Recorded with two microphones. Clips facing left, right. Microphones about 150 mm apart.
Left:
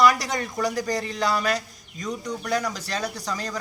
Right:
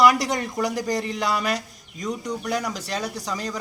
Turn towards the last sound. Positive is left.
turn(degrees=-15)  # may be behind; listen again after turning